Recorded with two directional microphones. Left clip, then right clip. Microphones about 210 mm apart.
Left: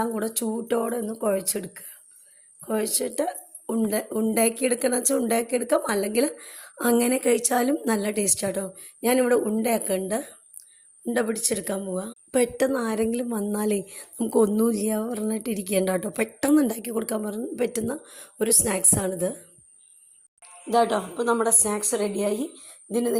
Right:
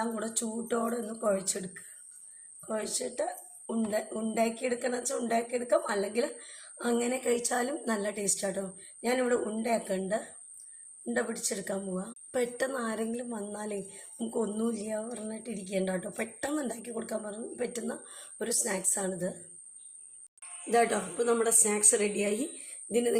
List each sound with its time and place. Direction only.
0.0 s a woman's voice: 40° left (ahead or behind)
20.7 s a woman's voice: 15° left (ahead or behind)